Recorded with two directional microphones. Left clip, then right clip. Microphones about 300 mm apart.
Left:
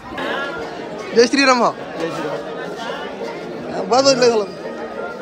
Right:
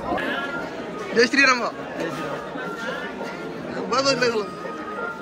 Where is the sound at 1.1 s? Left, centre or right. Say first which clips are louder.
Left 4 dB; centre.